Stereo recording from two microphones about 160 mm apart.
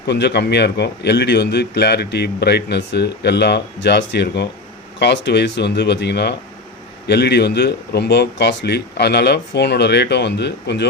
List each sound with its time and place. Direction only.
0.1 s a man's voice: 90° left